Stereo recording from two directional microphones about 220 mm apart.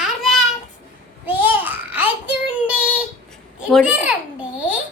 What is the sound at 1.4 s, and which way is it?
Babbling, 5° right (ahead or behind).